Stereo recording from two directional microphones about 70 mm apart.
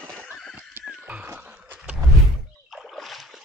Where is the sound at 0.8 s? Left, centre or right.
Right.